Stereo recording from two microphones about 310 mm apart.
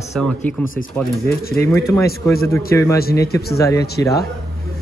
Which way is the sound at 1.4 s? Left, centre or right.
Left.